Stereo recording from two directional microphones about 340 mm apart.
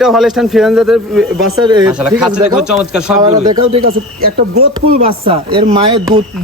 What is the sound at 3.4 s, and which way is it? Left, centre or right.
Speech, centre.